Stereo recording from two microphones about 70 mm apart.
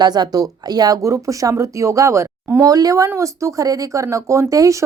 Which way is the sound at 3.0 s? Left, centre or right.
Right.